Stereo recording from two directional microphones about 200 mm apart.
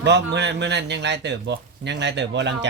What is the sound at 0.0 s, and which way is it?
Speech, 60° right (ahead or behind).